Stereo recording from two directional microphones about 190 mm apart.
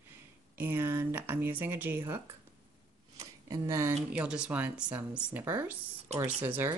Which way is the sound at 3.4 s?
15° right (ahead or behind).